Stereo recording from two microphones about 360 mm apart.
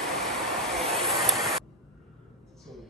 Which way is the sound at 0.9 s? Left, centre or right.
Centre.